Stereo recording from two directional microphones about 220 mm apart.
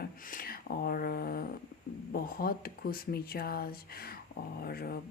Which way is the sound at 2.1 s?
45° left (ahead or behind).